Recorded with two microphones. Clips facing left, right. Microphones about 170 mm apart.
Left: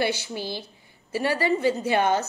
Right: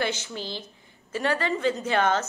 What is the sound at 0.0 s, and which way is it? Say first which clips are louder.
A woman's voice: left 3 dB; 10° left (ahead or behind).